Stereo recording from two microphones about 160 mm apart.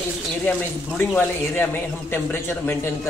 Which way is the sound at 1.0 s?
10° left (ahead or behind).